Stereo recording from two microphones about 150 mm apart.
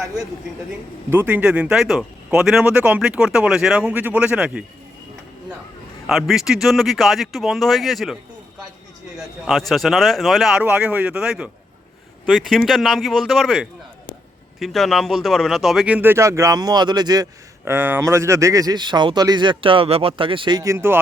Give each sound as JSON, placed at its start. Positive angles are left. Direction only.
{"t": 0.0, "sound": "speech", "side_deg": -25}
{"t": 6.1, "sound": "a man's voice", "side_deg": 0}
{"t": 17.7, "sound": "speech", "side_deg": -15}